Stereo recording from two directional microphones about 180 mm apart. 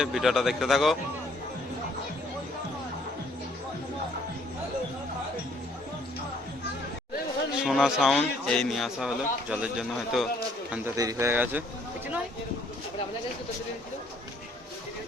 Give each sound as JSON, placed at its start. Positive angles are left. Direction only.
{"t": 0.0, "sound": "speech", "side_deg": 0}
{"t": 7.6, "sound": "speech", "side_deg": 0}
{"t": 10.7, "sound": "speech", "side_deg": -15}